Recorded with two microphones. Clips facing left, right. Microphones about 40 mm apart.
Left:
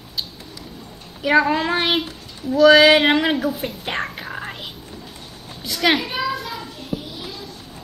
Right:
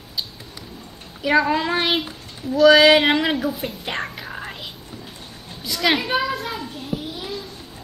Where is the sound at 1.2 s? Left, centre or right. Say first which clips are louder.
Left 1 dB; centre.